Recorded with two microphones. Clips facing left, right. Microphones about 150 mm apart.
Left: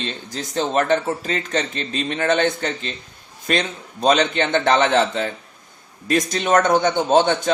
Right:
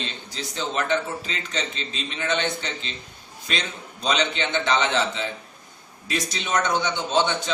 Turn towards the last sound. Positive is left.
turn(degrees=50)  # may be behind; listen again after turning